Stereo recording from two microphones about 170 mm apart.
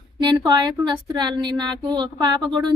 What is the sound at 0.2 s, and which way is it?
A woman's voice, 25° right (ahead or behind).